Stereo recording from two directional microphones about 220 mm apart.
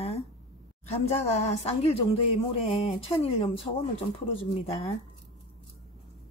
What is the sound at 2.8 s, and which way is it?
Speech, 25° left (ahead or behind).